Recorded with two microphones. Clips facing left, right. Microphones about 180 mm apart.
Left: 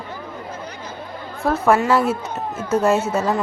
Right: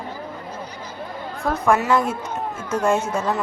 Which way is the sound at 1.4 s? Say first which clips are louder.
Left 3 dB; 5° left (ahead or behind).